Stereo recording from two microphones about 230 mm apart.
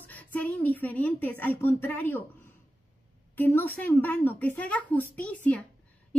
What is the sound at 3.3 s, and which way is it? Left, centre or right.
A woman's voice, centre.